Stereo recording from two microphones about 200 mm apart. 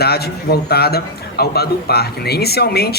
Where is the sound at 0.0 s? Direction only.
50° left (ahead or behind).